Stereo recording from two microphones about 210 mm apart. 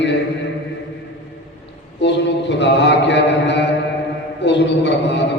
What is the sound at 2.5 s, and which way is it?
Mantra, 55° left (ahead or behind).